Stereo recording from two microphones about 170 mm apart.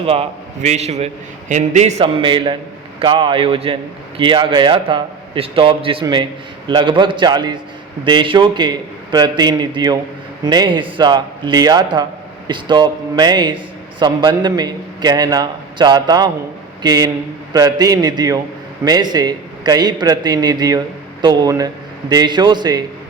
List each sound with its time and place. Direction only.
0.0 s a man's voice: 35° right (ahead or behind)